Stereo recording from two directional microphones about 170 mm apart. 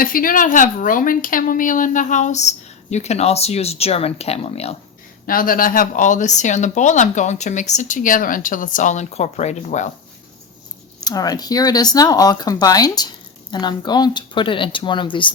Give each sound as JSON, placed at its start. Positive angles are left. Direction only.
{"t": 0.0, "sound": "speech", "side_deg": 55}
{"t": 5.2, "sound": "speech", "side_deg": 55}
{"t": 11.0, "sound": "a woman's voice", "side_deg": 20}